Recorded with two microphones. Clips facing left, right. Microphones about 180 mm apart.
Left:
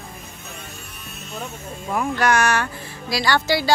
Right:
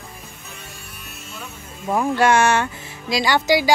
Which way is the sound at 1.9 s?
30° right (ahead or behind).